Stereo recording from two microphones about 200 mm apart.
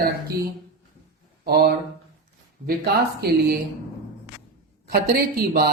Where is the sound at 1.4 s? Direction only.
50° right (ahead or behind).